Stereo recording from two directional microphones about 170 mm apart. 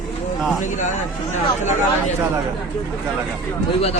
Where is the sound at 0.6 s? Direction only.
45° left (ahead or behind).